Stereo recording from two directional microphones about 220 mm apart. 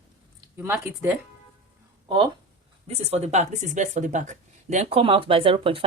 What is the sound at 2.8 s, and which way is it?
Speech, 30° right (ahead or behind).